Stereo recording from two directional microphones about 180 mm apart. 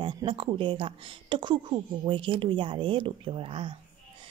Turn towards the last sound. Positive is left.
turn(degrees=-30)  # may be behind; listen again after turning